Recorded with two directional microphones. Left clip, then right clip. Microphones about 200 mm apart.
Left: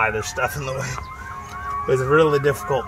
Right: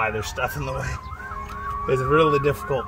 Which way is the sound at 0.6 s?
Centre (ahead or behind).